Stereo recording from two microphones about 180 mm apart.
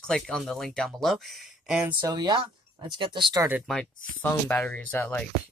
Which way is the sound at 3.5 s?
Centre (ahead or behind).